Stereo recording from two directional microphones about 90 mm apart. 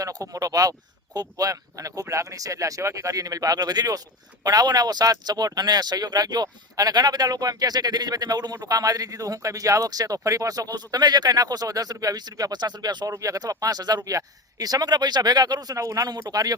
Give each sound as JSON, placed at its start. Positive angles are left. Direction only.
{"t": 0.0, "sound": "speech", "side_deg": -40}
{"t": 13.1, "sound": "speech", "side_deg": -40}